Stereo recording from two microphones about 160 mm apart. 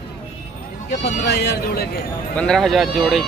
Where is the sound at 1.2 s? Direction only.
90° left.